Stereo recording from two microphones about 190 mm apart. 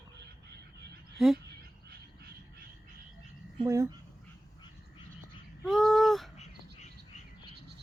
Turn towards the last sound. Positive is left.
turn(degrees=35)  # may be behind; listen again after turning